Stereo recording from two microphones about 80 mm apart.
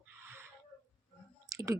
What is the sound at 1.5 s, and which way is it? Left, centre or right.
Clicking, right.